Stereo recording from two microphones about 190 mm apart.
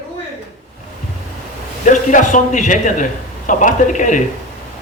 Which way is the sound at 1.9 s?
40° left (ahead or behind).